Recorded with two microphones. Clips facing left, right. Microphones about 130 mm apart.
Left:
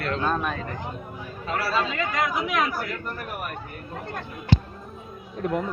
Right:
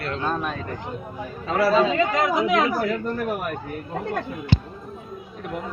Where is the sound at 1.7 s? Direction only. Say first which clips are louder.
Right 6 dB; 30° right (ahead or behind).